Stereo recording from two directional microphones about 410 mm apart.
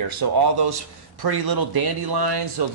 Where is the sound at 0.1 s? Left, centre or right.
Right.